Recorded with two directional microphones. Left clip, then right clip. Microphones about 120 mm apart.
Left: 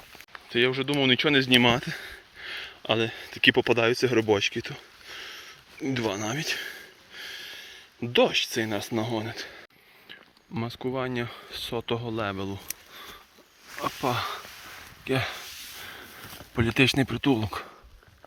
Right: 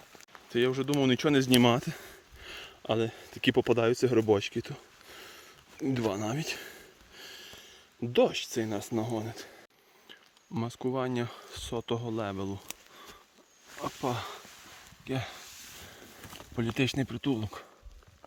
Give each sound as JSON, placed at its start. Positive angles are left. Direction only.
{"t": 0.7, "sound": "speech", "side_deg": -40}
{"t": 2.8, "sound": "a sound", "side_deg": -25}
{"t": 8.6, "sound": "speech", "side_deg": -20}
{"t": 10.1, "sound": "speech", "side_deg": -30}
{"t": 11.7, "sound": "speech", "side_deg": -25}
{"t": 13.8, "sound": "speech", "side_deg": -15}
{"t": 15.0, "sound": "speech", "side_deg": 5}
{"t": 15.8, "sound": "a sound", "side_deg": 0}
{"t": 16.6, "sound": "speech", "side_deg": 0}